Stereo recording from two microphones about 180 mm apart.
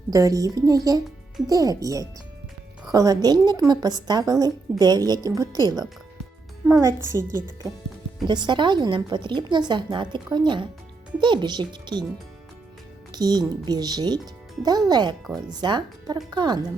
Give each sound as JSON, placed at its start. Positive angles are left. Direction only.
{"t": 0.1, "sound": "a woman's voice", "side_deg": -20}
{"t": 8.3, "sound": "a woman's voice", "side_deg": -25}
{"t": 13.1, "sound": "a woman's voice", "side_deg": -25}